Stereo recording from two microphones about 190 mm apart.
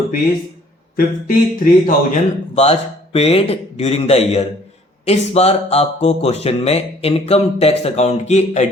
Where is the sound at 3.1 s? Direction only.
30° left (ahead or behind).